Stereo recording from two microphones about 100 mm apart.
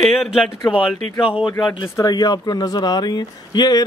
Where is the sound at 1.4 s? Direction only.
55° left (ahead or behind).